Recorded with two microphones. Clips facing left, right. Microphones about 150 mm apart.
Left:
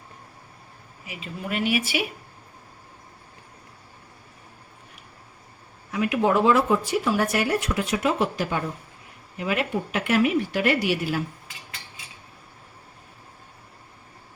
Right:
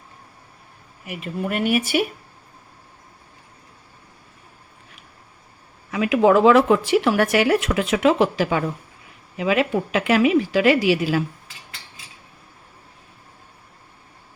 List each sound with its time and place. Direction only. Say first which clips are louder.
1.0 s speech: right 7 dB; 55° right (ahead or behind)
5.9 s speech: right 6 dB; 90° right